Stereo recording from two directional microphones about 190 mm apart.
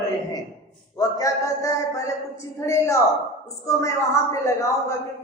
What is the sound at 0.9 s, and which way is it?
A man's voice, 15° left (ahead or behind).